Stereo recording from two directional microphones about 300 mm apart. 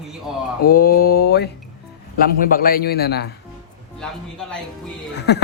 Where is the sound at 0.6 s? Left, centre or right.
Left.